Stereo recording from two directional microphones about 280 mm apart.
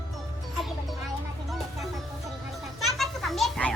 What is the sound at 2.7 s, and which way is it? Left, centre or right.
Children playing, centre.